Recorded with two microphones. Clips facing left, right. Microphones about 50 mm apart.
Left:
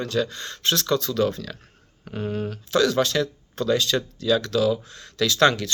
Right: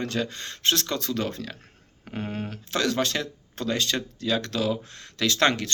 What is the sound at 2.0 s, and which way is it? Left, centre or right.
Speech, right.